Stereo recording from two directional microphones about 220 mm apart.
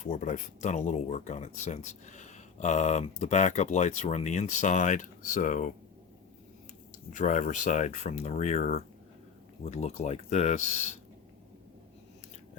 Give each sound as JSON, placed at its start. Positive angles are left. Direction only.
{"t": 0.0, "sound": "speech", "side_deg": 35}
{"t": 7.1, "sound": "speech", "side_deg": 35}